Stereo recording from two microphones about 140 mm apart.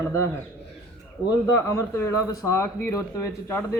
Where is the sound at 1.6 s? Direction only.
20° left (ahead or behind).